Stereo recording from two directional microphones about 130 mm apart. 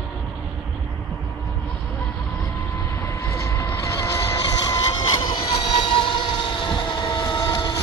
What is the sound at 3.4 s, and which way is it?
Vehicle, 20° left (ahead or behind).